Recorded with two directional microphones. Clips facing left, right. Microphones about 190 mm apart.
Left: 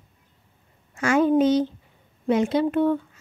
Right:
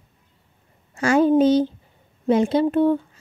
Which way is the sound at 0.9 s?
35° right (ahead or behind).